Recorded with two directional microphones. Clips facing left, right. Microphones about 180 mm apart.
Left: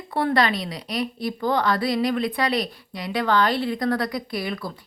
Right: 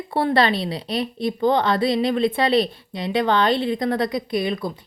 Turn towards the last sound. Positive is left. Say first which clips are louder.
# right 5 dB
turn(degrees=-20)  # may be behind; listen again after turning